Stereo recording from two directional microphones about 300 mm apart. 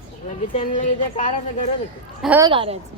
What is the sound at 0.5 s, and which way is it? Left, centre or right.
Speech, left.